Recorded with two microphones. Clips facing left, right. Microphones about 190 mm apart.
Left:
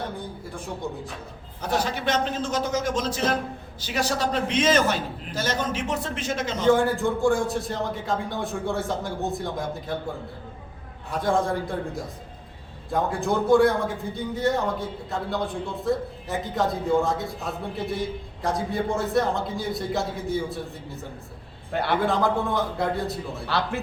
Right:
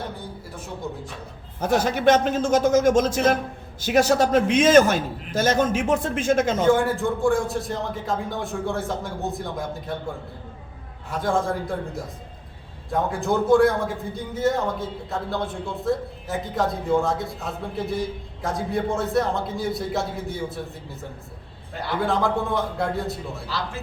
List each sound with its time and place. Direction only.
1.6 s a man's voice: 45° right (ahead or behind)
6.7 s a man's voice: centre (ahead or behind)
11.1 s a man's voice: centre (ahead or behind)
12.9 s a man's voice: centre (ahead or behind)
21.7 s a man's voice: 65° left (ahead or behind)
22.0 s a man's voice: centre (ahead or behind)
23.5 s speech: 65° left (ahead or behind)